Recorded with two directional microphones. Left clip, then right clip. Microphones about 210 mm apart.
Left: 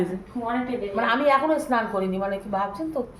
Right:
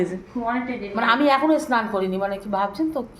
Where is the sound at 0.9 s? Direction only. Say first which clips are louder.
Right 2 dB; 15° right (ahead or behind).